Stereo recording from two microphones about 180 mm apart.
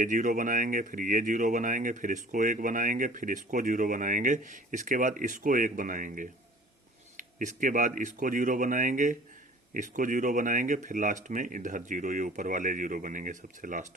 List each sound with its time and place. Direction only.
0.0 s speech: 45° right (ahead or behind)